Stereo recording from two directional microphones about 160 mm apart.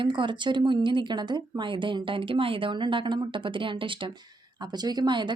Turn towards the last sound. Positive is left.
turn(degrees=-30)  # may be behind; listen again after turning